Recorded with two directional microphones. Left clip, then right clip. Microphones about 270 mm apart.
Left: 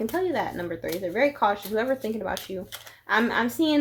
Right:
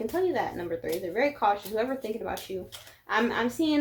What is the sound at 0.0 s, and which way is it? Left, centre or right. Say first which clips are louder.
Speech: left 1 dB; left.